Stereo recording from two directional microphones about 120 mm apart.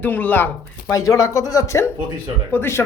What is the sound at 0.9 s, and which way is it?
A man's voice, 25° left (ahead or behind).